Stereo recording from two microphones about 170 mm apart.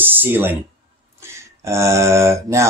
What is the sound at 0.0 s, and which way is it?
Speech, 10° right (ahead or behind).